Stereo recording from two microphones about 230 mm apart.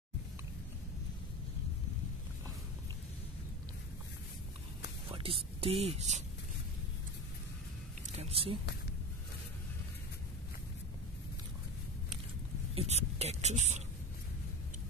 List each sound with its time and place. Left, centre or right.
5.1 s speech: right
8.2 s speech: right
12.7 s speech: right